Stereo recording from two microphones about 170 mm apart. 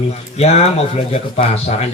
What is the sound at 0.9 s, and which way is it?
Speech, 35° left (ahead or behind).